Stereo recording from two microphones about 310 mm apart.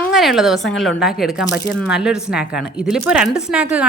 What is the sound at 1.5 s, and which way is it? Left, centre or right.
Speech, left.